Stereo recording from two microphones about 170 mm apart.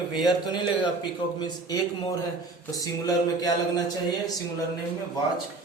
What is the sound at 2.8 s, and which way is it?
A man's voice, 20° left (ahead or behind).